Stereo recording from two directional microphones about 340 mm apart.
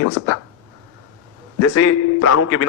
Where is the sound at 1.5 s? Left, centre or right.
Left.